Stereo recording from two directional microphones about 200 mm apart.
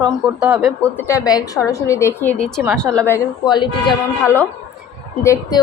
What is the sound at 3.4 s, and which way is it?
Speech, 20° left (ahead or behind).